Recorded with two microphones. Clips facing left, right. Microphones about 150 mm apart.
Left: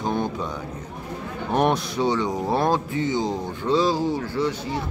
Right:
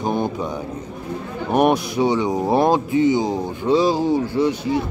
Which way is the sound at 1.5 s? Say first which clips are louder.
Right 4 dB; 10° right (ahead or behind).